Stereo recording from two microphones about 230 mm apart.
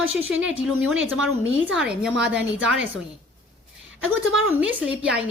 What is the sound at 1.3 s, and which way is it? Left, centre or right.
Speech, right.